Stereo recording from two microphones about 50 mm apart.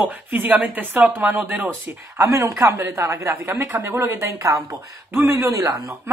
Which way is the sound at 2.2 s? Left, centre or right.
Right.